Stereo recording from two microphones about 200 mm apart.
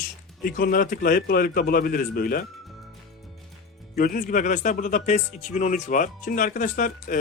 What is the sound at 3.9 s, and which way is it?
Speech, 45° left (ahead or behind).